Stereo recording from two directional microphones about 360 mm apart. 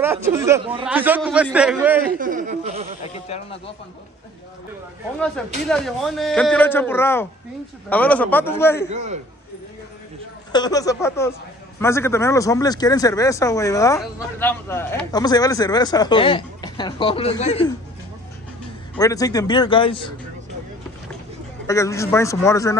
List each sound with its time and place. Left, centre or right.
0.0 s a man's voice: centre
2.1 s a sound: right
3.3 s speech: centre
5.2 s a man's voice: centre
8.9 s a man's voice: centre
10.5 s speech: centre
18.9 s speech: centre
21.6 s speech: centre